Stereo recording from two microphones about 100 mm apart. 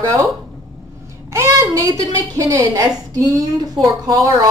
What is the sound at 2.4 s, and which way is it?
A woman's voice, 35° right (ahead or behind).